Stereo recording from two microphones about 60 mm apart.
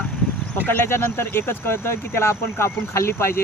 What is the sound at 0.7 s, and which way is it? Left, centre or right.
Speech, left.